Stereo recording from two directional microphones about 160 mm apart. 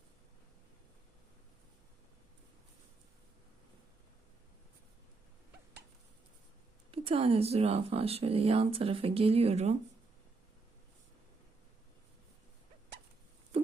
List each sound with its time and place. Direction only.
6.9 s speech: 35° right (ahead or behind)